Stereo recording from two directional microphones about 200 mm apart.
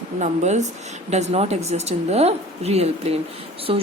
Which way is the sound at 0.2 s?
35° right (ahead or behind).